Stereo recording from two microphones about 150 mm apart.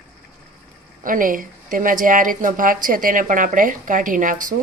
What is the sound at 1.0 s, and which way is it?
Speech, 65° right (ahead or behind).